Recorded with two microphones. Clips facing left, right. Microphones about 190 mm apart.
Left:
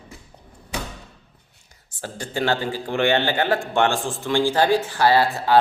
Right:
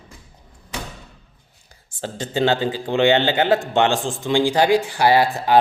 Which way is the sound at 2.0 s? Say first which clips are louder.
Right 4 dB; 20° right (ahead or behind).